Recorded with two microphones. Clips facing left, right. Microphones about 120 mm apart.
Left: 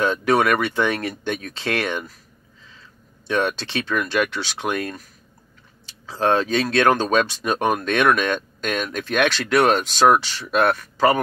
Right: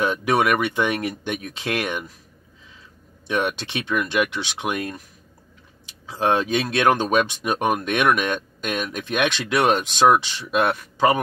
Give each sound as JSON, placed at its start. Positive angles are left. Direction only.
{"t": 0.0, "sound": "speech", "side_deg": -15}
{"t": 3.3, "sound": "speech", "side_deg": -15}